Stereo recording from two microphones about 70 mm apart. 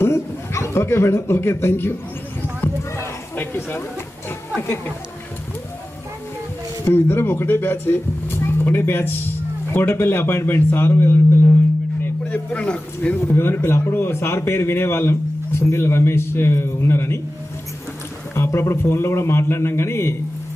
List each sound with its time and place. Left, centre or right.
0.0 s a man's voice: left
3.3 s speech: left
6.8 s a man's voice: left
12.3 s speech: centre
13.3 s a man's voice: left
18.3 s a man's voice: left